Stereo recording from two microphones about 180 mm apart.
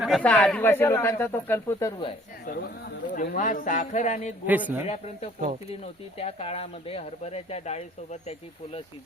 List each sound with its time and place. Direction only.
0.0 s speech: centre (ahead or behind)
2.5 s a man's voice: 60° left (ahead or behind); by 4.4 s 40° left (ahead or behind)
4.4 s a woman's voice: 10° right (ahead or behind)
4.9 s speech: 35° left (ahead or behind)